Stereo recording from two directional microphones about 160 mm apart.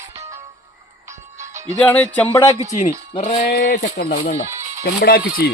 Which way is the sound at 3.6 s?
70° left (ahead or behind).